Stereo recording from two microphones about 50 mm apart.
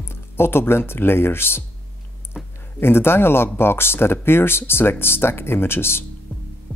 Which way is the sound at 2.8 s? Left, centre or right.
Left.